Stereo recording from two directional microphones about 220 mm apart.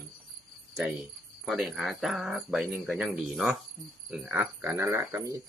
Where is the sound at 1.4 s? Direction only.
Centre (ahead or behind).